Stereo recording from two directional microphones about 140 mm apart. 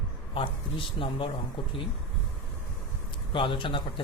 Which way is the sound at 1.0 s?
40° left (ahead or behind).